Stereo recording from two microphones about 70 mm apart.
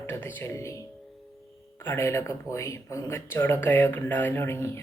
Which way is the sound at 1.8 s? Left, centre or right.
Left.